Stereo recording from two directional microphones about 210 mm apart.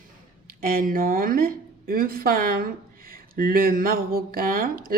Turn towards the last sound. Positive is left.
turn(degrees=-45)  # may be behind; listen again after turning